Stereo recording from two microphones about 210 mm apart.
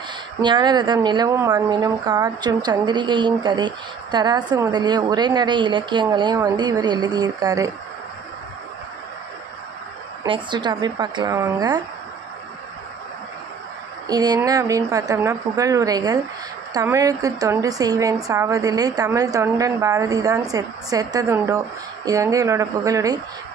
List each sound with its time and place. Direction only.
0.4 s a woman's voice: 20° right (ahead or behind)
10.2 s a woman's voice: 20° right (ahead or behind)
14.0 s a woman's voice: 20° right (ahead or behind)